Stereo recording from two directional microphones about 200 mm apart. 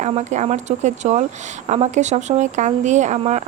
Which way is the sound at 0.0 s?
35° right (ahead or behind).